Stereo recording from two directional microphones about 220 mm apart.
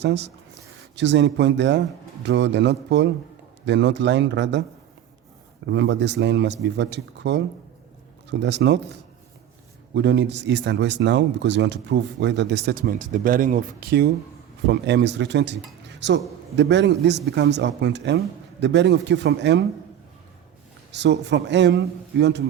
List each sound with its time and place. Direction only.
0.0 s speech: 50° right (ahead or behind)
5.6 s speech: 55° right (ahead or behind)
20.9 s speech: 50° right (ahead or behind)